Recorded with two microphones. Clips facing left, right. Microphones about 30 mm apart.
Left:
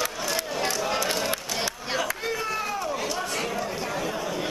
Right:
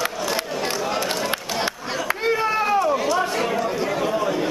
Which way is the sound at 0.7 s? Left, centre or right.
Centre.